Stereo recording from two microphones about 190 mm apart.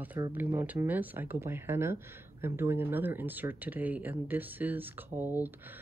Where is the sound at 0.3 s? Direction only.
10° right (ahead or behind).